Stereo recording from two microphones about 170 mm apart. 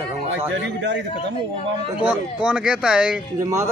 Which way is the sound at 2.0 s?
5° right (ahead or behind).